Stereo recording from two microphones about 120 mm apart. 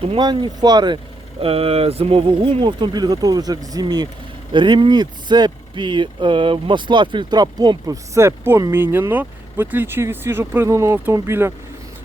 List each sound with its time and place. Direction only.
0.2 s speech: 40° right (ahead or behind)
1.4 s speech: 55° right (ahead or behind); by 11.5 s 20° right (ahead or behind)